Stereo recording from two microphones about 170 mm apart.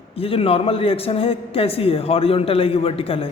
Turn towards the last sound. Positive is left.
turn(degrees=35)  # may be behind; listen again after turning